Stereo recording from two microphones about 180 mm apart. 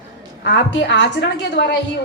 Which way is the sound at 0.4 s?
90° left.